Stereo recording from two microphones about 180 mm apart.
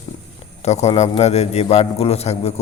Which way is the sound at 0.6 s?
40° left (ahead or behind).